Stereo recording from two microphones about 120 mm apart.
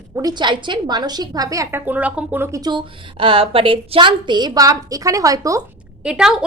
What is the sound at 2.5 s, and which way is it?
Speech, 35° right (ahead or behind).